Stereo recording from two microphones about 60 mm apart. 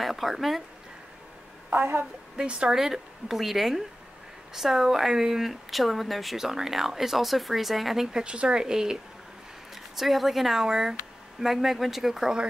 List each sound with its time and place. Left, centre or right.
0.0 s speech: centre
1.7 s a woman's voice: right
2.3 s speech: centre
2.7 s speech: centre